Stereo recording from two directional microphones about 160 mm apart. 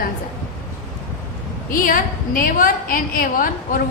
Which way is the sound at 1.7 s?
60° left (ahead or behind).